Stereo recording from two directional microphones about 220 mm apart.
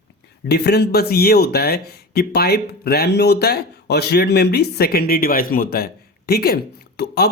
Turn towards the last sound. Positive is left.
turn(degrees=45)  # may be behind; listen again after turning